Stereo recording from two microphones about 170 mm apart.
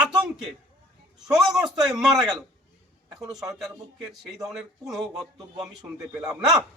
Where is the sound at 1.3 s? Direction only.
5° right (ahead or behind).